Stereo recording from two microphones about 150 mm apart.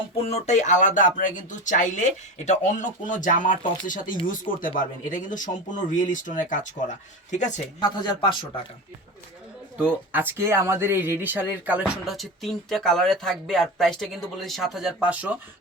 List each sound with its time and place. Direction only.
0.3 s speech: 45° left (ahead or behind)
7.8 s speech: 30° left (ahead or behind)
9.7 s speech: 10° right (ahead or behind)